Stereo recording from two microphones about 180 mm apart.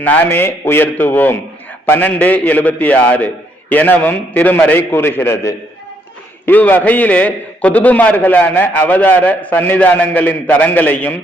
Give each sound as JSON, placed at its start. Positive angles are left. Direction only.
{"t": 0.0, "sound": "a man's voice", "side_deg": 10}